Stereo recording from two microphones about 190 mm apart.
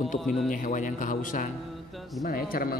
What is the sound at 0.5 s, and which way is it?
Speech, 45° left (ahead or behind).